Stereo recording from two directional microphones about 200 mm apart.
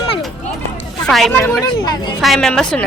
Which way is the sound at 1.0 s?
Centre (ahead or behind).